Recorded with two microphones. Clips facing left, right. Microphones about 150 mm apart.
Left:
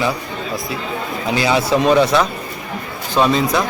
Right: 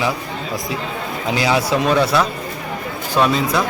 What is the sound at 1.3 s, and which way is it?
A man's voice, 10° right (ahead or behind).